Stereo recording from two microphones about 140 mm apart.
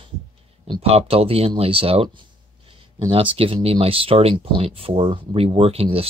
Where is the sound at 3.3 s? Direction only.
45° right (ahead or behind).